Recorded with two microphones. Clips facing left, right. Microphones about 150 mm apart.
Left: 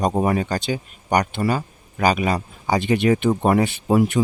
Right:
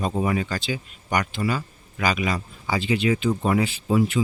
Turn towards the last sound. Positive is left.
turn(degrees=55)  # may be behind; listen again after turning